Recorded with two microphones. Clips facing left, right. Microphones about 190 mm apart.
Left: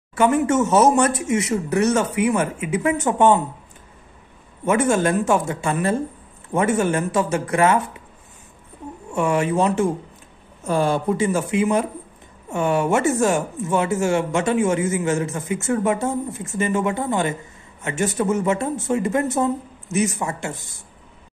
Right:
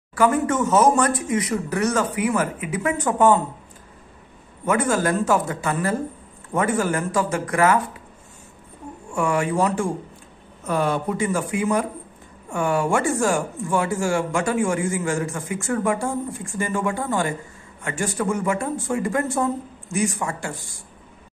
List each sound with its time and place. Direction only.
0.1 s speech: 25° left (ahead or behind)
4.6 s speech: 25° left (ahead or behind)
9.1 s speech: 25° left (ahead or behind)